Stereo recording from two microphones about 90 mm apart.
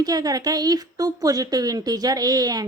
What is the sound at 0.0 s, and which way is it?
A woman's voice, 45° right (ahead or behind).